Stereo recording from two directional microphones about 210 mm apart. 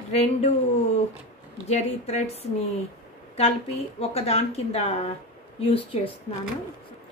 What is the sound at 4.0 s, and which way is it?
A woman's voice, 30° left (ahead or behind).